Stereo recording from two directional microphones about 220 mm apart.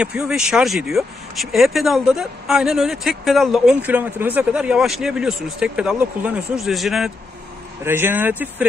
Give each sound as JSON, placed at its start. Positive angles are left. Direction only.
{"t": 0.0, "sound": "speech", "side_deg": -5}